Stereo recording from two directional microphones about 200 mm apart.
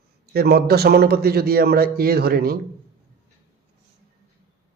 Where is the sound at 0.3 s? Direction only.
50° right (ahead or behind).